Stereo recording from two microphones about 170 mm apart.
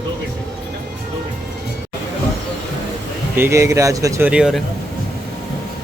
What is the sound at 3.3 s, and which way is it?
Speech, 15° right (ahead or behind).